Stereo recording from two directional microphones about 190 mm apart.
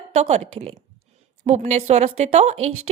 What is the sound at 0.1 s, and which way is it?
A woman's voice, 35° right (ahead or behind).